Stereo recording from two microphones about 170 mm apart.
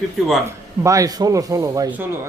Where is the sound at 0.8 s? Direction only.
20° right (ahead or behind).